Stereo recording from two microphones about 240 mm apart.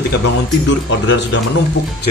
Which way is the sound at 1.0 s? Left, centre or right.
Left.